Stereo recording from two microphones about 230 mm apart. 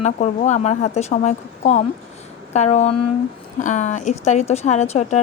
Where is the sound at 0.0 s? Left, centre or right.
Left.